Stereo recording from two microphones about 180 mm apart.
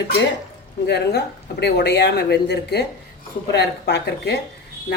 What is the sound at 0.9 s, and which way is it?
A woman's voice, 65° left (ahead or behind).